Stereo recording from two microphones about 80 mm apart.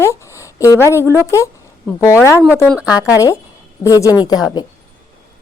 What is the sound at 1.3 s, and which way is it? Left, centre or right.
Speech, left.